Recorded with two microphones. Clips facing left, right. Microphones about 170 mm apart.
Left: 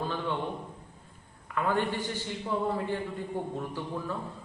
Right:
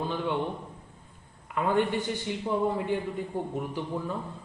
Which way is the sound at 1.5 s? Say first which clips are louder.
Right 3 dB; 20° right (ahead or behind).